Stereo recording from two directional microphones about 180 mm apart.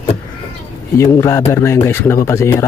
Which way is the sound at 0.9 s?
15° left (ahead or behind).